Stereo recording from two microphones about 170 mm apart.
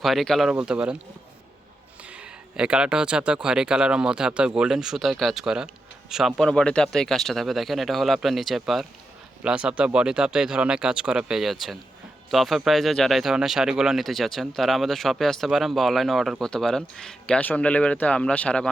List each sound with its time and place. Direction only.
0.0 s speech: centre (ahead or behind)
2.0 s speech: 5° right (ahead or behind)